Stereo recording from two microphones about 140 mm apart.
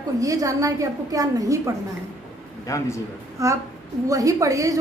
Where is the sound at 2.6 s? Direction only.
20° left (ahead or behind).